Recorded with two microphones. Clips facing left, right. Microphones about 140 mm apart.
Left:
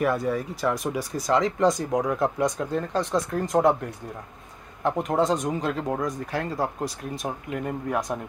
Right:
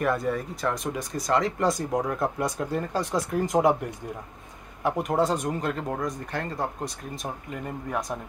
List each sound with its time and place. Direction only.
0.0 s speech: centre (ahead or behind)
4.8 s speech: 10° right (ahead or behind)